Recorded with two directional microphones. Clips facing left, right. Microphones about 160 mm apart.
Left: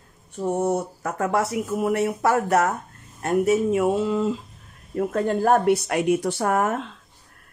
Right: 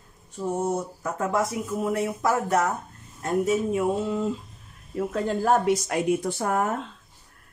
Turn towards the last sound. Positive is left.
turn(degrees=75)  # may be behind; listen again after turning